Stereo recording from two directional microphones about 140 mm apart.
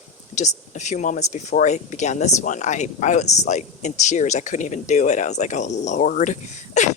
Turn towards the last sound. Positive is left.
turn(degrees=60)  # may be behind; listen again after turning